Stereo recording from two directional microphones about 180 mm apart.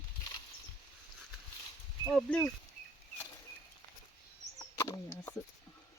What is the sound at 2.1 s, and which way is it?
Speech, 5° left (ahead or behind).